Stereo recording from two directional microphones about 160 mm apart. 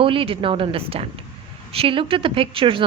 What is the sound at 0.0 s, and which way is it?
A woman's voice, 35° right (ahead or behind).